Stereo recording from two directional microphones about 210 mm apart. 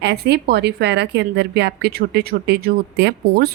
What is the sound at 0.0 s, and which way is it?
Speech, 50° right (ahead or behind).